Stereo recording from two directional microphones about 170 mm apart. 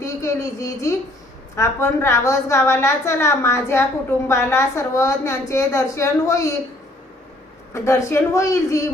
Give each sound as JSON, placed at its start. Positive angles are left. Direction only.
{"t": 0.0, "sound": "a woman's voice", "side_deg": 15}
{"t": 7.7, "sound": "a woman's voice", "side_deg": 15}